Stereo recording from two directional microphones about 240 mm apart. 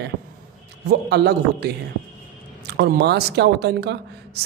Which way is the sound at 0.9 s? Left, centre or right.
Right.